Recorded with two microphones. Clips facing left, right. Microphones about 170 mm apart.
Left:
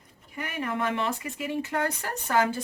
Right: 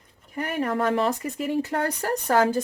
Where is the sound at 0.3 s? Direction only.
40° right (ahead or behind).